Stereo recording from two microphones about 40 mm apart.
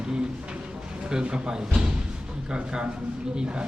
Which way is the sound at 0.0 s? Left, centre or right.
Centre.